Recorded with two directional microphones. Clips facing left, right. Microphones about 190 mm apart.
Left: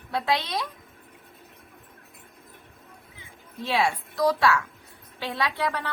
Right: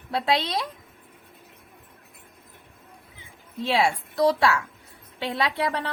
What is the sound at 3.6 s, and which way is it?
A woman's voice, 25° right (ahead or behind).